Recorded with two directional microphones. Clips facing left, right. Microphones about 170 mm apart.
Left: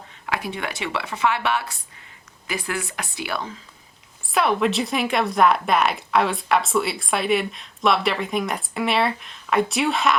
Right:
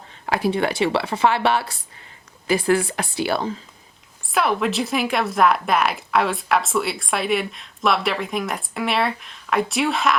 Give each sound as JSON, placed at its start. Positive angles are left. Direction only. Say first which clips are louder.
{"t": 0.3, "sound": "speech", "louder": "right 7 dB", "side_deg": -35}
{"t": 4.3, "sound": "speech", "louder": "left 1 dB", "side_deg": 0}